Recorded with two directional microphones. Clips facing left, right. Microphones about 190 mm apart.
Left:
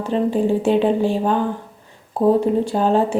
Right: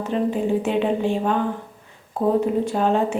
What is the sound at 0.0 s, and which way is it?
Speech, 30° left (ahead or behind).